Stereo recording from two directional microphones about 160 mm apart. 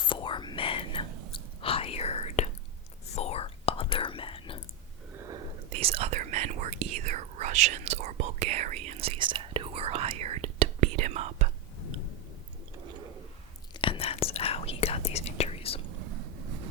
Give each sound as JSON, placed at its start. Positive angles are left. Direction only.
{"t": 0.0, "sound": "whispering", "side_deg": 30}
{"t": 5.1, "sound": "whispering", "side_deg": -20}
{"t": 5.7, "sound": "whispering", "side_deg": -40}
{"t": 13.7, "sound": "whispering", "side_deg": 35}